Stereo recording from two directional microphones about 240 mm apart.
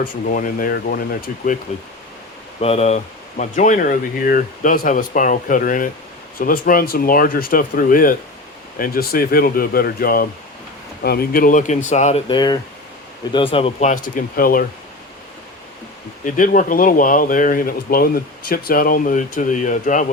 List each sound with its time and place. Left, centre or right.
0.0 s speech: left
2.6 s speech: left
16.2 s speech: left